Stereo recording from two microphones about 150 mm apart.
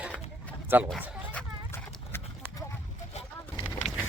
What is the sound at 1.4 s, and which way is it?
Clip-clop, 5° left (ahead or behind).